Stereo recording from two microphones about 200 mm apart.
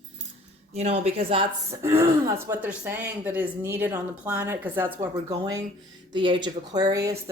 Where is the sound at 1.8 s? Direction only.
10° right (ahead or behind).